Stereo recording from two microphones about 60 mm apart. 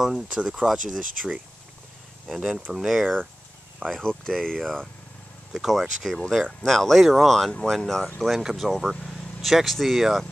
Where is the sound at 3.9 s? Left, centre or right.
Centre.